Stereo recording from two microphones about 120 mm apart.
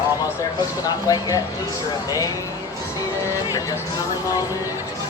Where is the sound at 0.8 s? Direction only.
30° left (ahead or behind).